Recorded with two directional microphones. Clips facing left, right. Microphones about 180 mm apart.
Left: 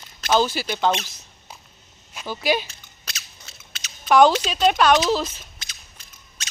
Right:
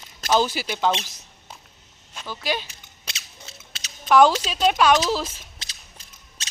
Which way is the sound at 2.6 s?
25° right (ahead or behind).